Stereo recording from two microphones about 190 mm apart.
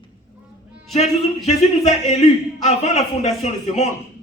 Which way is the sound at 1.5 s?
35° left (ahead or behind).